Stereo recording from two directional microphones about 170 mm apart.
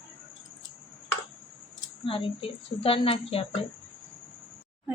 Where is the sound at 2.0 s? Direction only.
30° left (ahead or behind).